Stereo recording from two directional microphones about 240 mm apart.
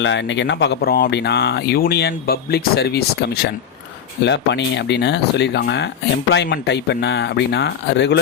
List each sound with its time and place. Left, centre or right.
0.0 s speech: left